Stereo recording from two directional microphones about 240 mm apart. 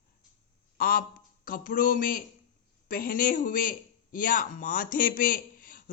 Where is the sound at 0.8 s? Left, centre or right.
Left.